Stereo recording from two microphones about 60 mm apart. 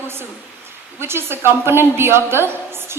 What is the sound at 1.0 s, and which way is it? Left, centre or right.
A woman's voice, right.